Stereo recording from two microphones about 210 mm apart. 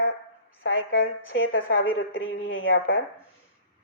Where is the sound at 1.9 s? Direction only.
70° left (ahead or behind).